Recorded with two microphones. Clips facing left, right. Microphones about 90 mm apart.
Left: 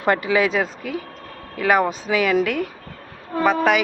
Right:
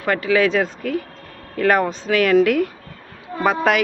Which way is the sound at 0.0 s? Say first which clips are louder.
Right 1 dB; 20° left (ahead or behind).